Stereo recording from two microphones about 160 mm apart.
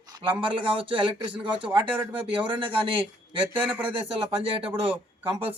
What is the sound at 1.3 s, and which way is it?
Speech, 10° right (ahead or behind).